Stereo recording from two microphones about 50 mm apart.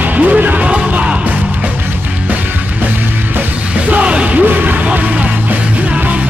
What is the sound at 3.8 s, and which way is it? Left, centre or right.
Music, right.